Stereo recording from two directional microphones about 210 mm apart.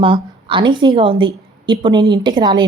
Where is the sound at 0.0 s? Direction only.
25° right (ahead or behind).